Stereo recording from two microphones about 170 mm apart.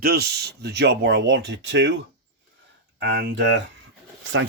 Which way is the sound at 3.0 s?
85° right.